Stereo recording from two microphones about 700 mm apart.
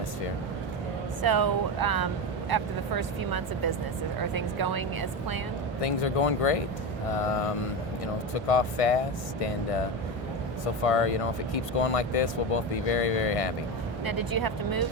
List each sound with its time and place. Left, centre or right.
1.2 s speech: right
5.8 s speech: left
10.8 s speech: left
14.1 s speech: right